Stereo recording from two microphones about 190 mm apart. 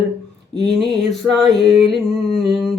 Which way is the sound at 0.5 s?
60° right (ahead or behind).